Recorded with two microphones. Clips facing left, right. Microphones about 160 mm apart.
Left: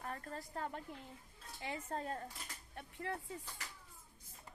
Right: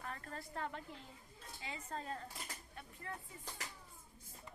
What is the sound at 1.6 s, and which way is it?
Speech, 55° left (ahead or behind).